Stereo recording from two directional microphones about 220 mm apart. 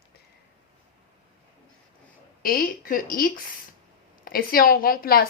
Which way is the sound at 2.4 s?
40° left (ahead or behind).